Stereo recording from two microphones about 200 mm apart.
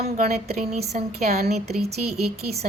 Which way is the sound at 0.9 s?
40° right (ahead or behind).